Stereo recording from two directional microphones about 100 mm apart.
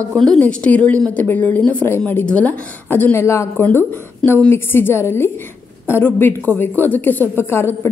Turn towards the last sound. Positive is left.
turn(degrees=25)  # may be behind; listen again after turning